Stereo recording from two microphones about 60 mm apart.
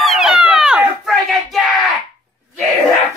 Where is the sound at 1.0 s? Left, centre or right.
Centre.